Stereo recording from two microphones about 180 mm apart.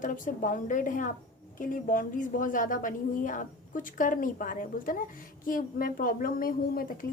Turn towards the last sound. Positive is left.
turn(degrees=50)  # may be behind; listen again after turning